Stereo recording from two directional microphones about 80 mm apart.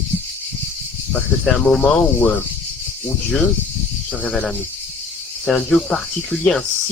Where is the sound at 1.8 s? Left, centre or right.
Centre.